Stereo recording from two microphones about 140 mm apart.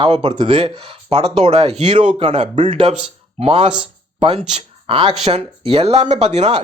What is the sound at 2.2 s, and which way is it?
Speech, 40° right (ahead or behind).